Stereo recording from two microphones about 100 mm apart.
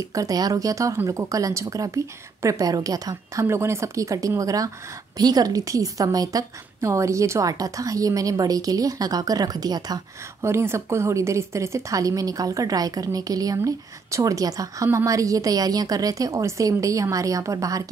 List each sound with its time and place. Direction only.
0.1 s a woman's voice: 35° right (ahead or behind)
3.4 s a woman's voice: 25° right (ahead or behind); by 10.0 s 40° right (ahead or behind)
10.4 s a woman's voice: 25° right (ahead or behind)